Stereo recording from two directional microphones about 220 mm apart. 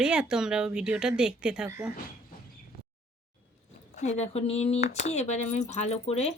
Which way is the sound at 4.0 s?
30° left (ahead or behind).